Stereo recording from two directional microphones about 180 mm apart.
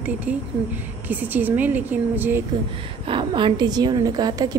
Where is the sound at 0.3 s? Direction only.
10° right (ahead or behind).